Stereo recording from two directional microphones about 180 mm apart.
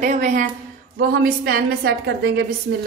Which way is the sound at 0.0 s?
45° right (ahead or behind).